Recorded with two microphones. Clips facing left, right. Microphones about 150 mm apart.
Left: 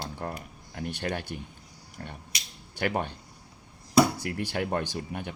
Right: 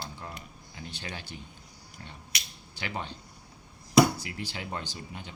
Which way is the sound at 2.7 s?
55° left (ahead or behind).